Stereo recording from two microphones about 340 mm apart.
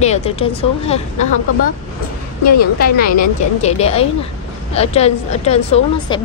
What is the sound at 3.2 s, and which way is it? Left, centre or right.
A woman's voice, centre.